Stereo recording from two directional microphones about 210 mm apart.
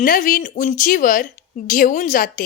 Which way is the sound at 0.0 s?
40° left (ahead or behind).